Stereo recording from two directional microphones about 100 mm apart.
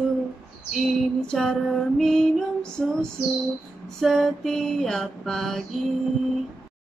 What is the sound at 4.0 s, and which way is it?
Mantra, 5° left (ahead or behind).